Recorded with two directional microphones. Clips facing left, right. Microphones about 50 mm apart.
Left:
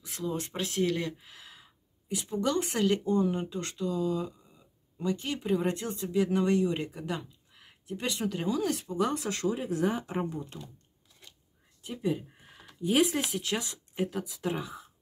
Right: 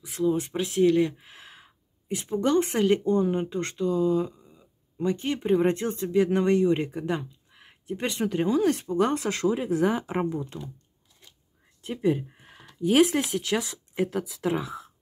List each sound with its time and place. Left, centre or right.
0.0 s speech: centre
1.1 s a woman's voice: right
8.7 s speech: right
11.8 s speech: right
12.8 s speech: right